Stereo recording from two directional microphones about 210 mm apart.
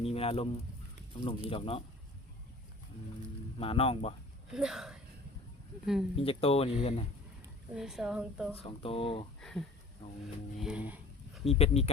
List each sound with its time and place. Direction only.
0.0 s a sound: 30° left (ahead or behind)
1.5 s speech: 25° left (ahead or behind)
3.6 s speech: 25° left (ahead or behind)
4.5 s a woman's voice: centre (ahead or behind)
6.1 s speech: 25° left (ahead or behind)
7.7 s a woman's voice: centre (ahead or behind)
8.5 s speech: 25° left (ahead or behind)
9.4 s a woman's voice: centre (ahead or behind)
10.6 s a sound: 5° right (ahead or behind)
11.4 s speech: 30° left (ahead or behind)